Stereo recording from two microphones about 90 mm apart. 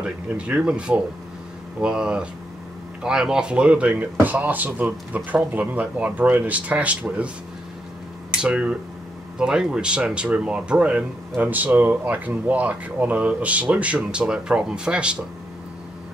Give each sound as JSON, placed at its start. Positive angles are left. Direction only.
{"t": 0.0, "sound": "speech", "side_deg": -10}
{"t": 8.4, "sound": "speech", "side_deg": -10}